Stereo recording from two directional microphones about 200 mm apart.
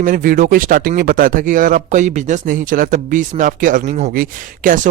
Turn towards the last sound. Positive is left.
turn(degrees=-40)  # may be behind; listen again after turning